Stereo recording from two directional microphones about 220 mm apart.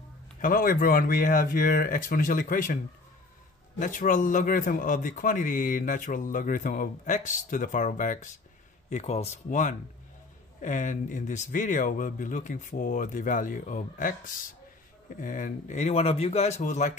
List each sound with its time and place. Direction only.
0.4 s a man's voice: 40° left (ahead or behind)
3.8 s a man's voice: 35° left (ahead or behind)